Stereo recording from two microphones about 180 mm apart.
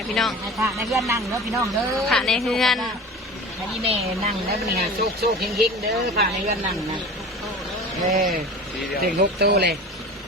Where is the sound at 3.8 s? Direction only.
35° right (ahead or behind).